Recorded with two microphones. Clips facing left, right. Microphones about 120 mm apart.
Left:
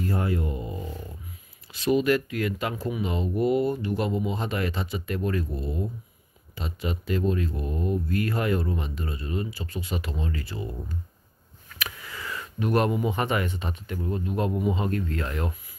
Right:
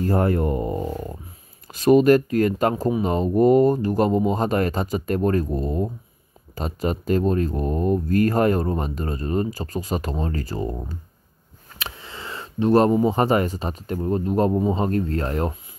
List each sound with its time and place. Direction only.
0.0 s speech: 50° right (ahead or behind)
11.7 s speech: 30° right (ahead or behind)